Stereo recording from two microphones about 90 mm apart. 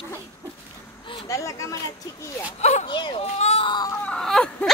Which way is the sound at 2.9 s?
70° left (ahead or behind).